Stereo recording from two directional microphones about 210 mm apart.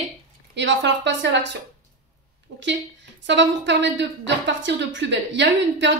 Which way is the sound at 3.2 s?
60° right (ahead or behind).